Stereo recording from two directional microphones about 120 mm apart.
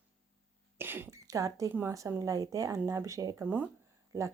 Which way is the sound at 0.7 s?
15° right (ahead or behind).